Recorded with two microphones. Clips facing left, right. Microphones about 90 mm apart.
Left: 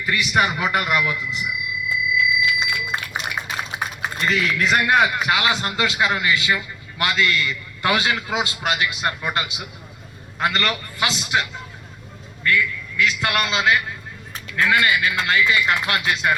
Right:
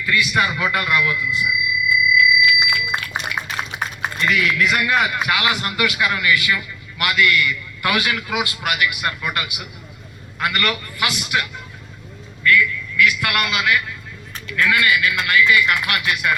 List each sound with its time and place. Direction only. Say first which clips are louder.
0.0 s a man's voice: right 1 dB; 20° left (ahead or behind)
2.1 s a sound: right 3 dB; 25° left (ahead or behind)
4.2 s a man's voice: right 2 dB; 30° left (ahead or behind)